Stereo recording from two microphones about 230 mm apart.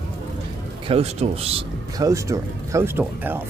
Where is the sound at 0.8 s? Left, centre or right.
Right.